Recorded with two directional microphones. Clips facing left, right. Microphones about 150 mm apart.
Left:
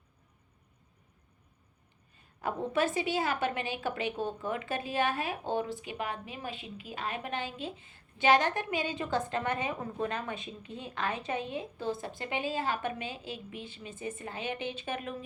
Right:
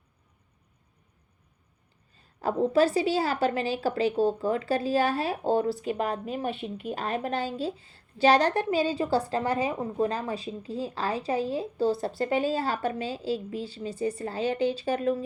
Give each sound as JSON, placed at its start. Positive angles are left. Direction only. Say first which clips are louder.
{"t": 2.4, "sound": "a woman's voice", "louder": "right 8 dB", "side_deg": -35}
{"t": 6.4, "sound": "speech", "louder": "right 9 dB", "side_deg": -55}
{"t": 7.0, "sound": "a woman's voice", "louder": "right 6 dB", "side_deg": -35}